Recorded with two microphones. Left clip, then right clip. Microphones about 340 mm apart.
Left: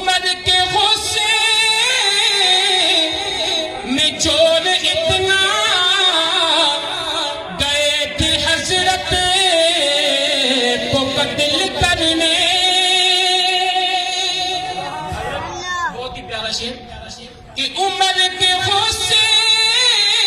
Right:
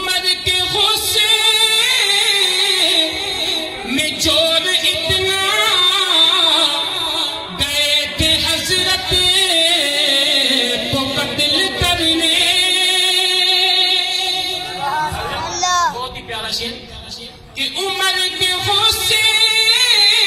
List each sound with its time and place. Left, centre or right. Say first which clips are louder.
0.6 s singing: left 1 dB; left
3.9 s music: even; left
15.6 s a sound: right 7 dB; centre
17.7 s music: left 3 dB; left